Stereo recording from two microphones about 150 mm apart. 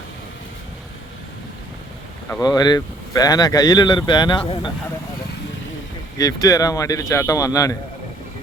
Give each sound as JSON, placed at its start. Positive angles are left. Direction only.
{"t": 2.4, "sound": "speech", "side_deg": 25}
{"t": 6.1, "sound": "speech", "side_deg": 25}